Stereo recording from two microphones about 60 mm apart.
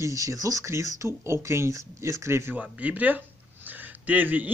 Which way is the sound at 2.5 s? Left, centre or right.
Right.